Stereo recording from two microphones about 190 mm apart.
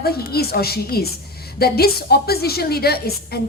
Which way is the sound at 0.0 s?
55° left (ahead or behind).